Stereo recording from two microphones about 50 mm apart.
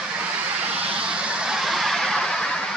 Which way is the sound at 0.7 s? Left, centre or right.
Right.